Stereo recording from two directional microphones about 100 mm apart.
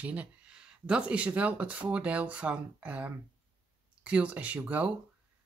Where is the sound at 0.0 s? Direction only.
15° right (ahead or behind).